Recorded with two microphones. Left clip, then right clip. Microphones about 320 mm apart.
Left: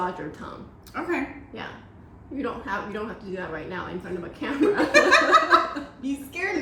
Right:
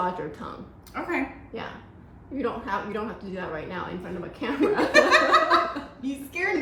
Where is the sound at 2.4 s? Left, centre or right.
Centre.